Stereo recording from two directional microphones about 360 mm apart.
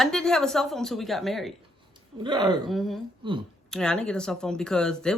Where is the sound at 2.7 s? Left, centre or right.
Centre.